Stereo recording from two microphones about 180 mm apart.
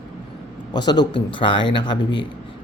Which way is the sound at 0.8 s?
25° left (ahead or behind).